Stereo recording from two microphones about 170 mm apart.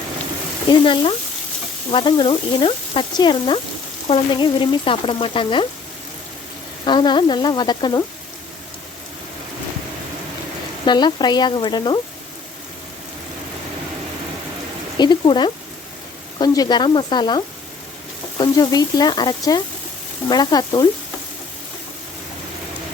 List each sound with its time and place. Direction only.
0.7 s frying: 30° left (ahead or behind)
6.8 s frying: 25° left (ahead or behind)
10.8 s frying: 25° left (ahead or behind)
14.9 s frying: 25° left (ahead or behind)